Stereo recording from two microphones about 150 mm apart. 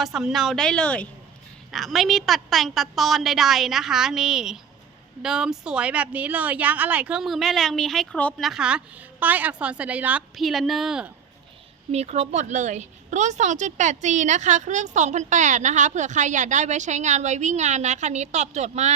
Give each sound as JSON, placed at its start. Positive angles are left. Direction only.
{"t": 0.0, "sound": "a woman's voice", "side_deg": -5}
{"t": 11.9, "sound": "a woman's voice", "side_deg": -45}